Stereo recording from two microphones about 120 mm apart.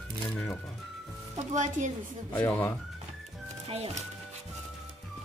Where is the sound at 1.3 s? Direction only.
90° right.